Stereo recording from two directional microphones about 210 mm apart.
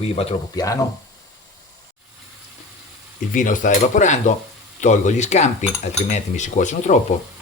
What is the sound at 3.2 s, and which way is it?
Speech, 40° left (ahead or behind).